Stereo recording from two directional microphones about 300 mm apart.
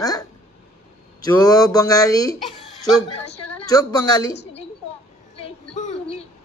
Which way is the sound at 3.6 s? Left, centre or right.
Centre.